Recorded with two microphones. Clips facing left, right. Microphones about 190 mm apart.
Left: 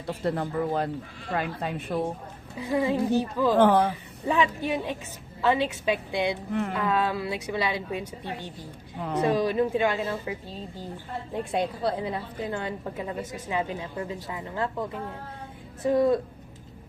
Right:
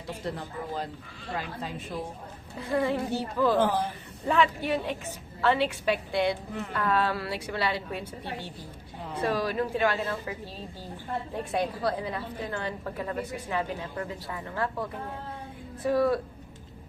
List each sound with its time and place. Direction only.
0.1 s speech: 60° left (ahead or behind)
2.6 s a woman's voice: 15° left (ahead or behind)
3.6 s speech: 65° left (ahead or behind)
4.3 s a woman's voice: 15° left (ahead or behind)
9.0 s a woman's voice: 65° left (ahead or behind)
9.2 s a woman's voice: 20° left (ahead or behind)
11.5 s a woman's voice: 25° left (ahead or behind)